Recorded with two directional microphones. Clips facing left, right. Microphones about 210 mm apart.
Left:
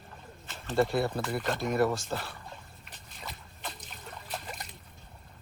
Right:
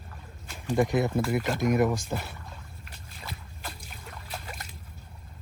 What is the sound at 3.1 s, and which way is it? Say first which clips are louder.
Boat: right 2 dB; 5° right (ahead or behind).